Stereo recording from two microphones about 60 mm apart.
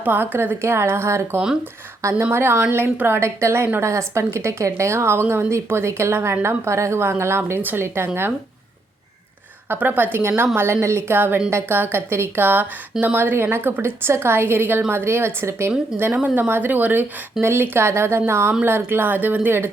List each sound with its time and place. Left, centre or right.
0.0 s speech: right
2.2 s a woman's voice: right
9.6 s a woman's voice: right
11.5 s a woman's voice: right
16.1 s a woman's voice: right
17.4 s a woman's voice: right